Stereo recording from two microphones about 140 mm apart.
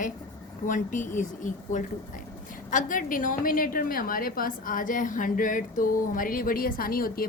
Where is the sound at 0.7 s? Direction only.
65° left (ahead or behind).